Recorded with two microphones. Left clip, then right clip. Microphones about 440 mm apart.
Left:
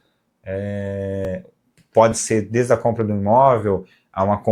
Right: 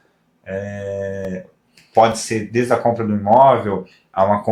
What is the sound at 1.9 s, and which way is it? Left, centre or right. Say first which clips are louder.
Speech: right 1 dB; left.